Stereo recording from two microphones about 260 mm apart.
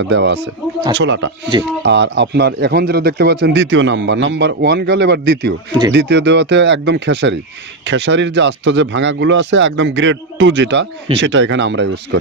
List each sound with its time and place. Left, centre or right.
0.1 s speech: right